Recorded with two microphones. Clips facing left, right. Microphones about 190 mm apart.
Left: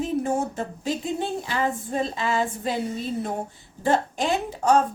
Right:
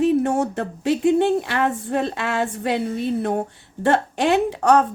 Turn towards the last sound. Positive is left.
turn(degrees=-70)  # may be behind; listen again after turning